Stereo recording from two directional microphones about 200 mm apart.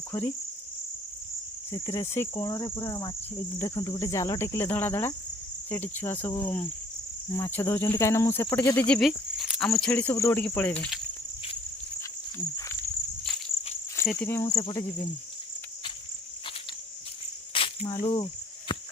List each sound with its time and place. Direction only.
0.1 s cricket: 10° left (ahead or behind)
1.7 s cricket: 15° left (ahead or behind)
8.9 s cricket: centre (ahead or behind)
14.1 s cricket: 10° left (ahead or behind)
17.5 s cricket: 25° left (ahead or behind)